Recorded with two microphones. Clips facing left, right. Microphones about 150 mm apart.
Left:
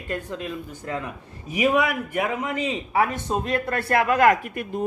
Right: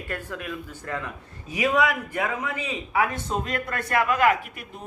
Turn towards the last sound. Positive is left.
turn(degrees=45)  # may be behind; listen again after turning